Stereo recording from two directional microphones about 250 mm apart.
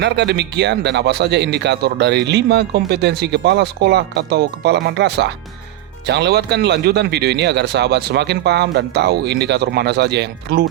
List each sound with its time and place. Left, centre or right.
0.0 s a man's voice: right